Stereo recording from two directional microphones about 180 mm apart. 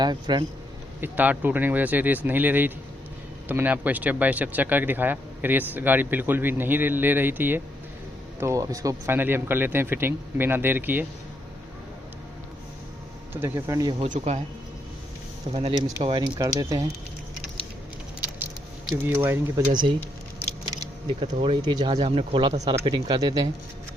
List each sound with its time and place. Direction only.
0.0 s speech: 25° right (ahead or behind)
1.0 s speech: 10° right (ahead or behind)
13.3 s speech: 15° right (ahead or behind)
14.0 s speech: 40° right (ahead or behind)
15.5 s speech: 35° right (ahead or behind)
16.4 s speech: 20° right (ahead or behind)
19.1 s speech: 15° right (ahead or behind)
20.7 s keys jangling: 25° right (ahead or behind)
21.3 s speech: 30° right (ahead or behind)